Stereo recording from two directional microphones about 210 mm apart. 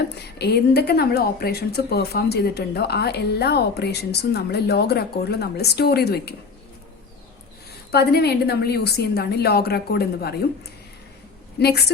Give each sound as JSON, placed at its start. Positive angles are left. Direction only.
{"t": 0.3, "sound": "a woman's voice", "side_deg": 50}
{"t": 7.9, "sound": "a woman's voice", "side_deg": 50}
{"t": 11.6, "sound": "a woman's voice", "side_deg": 50}